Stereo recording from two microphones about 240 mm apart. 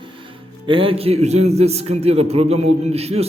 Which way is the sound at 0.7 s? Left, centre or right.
Right.